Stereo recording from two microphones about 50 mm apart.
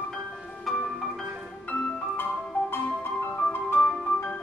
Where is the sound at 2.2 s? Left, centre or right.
Left.